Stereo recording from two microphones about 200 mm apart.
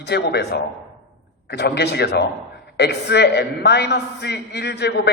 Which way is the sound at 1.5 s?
55° left (ahead or behind).